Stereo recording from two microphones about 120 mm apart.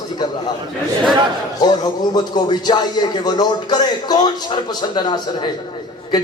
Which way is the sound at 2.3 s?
35° left (ahead or behind).